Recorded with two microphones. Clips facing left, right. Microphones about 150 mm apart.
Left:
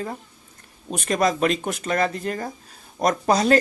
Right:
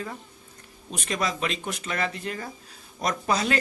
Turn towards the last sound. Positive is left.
turn(degrees=40)  # may be behind; listen again after turning